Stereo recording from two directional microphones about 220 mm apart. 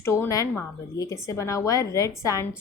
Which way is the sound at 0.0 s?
10° left (ahead or behind).